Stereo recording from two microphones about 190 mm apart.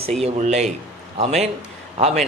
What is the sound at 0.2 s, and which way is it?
Speech, 35° right (ahead or behind).